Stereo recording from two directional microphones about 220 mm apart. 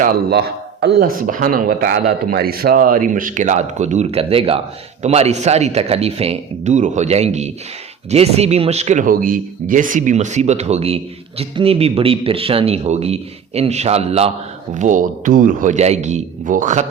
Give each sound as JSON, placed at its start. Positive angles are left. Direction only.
{"t": 0.0, "sound": "a man's voice", "side_deg": -45}